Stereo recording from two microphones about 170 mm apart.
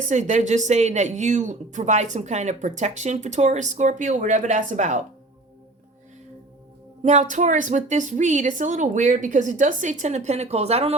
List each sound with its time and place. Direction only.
0.1 s a woman's voice: 45° right (ahead or behind)
7.0 s a woman's voice: 45° right (ahead or behind)